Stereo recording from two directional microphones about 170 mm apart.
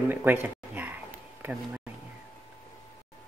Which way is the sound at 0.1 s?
10° right (ahead or behind).